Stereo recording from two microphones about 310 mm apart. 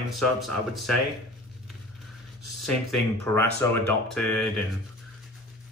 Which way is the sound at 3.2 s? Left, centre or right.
Centre.